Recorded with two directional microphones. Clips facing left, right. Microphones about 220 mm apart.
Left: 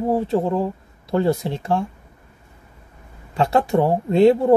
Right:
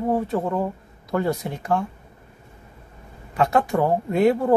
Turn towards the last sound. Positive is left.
turn(degrees=25)  # may be behind; listen again after turning